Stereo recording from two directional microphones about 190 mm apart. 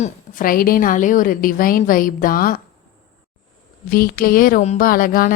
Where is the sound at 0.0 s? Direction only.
45° left (ahead or behind).